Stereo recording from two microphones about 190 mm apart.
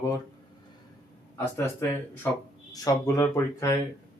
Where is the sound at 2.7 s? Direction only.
15° left (ahead or behind).